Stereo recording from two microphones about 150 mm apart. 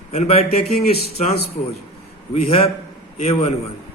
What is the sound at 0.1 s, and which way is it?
A man's voice, 45° left (ahead or behind).